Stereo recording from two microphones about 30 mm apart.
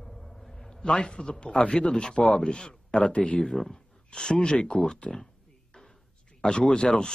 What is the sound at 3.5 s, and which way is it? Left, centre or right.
Speech, centre.